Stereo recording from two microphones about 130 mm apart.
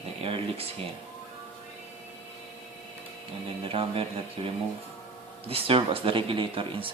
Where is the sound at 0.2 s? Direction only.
50° right (ahead or behind).